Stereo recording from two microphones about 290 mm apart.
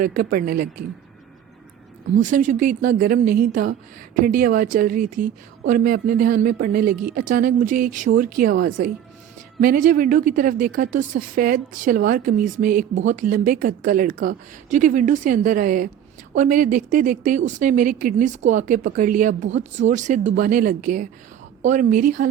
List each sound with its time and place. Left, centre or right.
0.2 s speech: right
2.1 s speech: right